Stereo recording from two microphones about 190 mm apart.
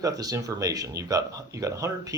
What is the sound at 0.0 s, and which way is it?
Speech, 20° right (ahead or behind).